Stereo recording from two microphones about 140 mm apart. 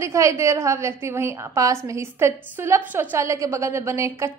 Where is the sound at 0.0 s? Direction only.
20° right (ahead or behind).